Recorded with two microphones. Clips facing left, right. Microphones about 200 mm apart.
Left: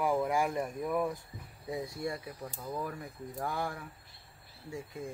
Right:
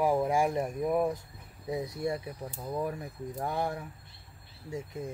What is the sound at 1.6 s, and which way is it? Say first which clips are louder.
Speech: right 4 dB; 20° right (ahead or behind).